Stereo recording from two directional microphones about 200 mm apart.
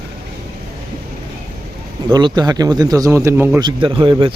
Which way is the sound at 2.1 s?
20° right (ahead or behind).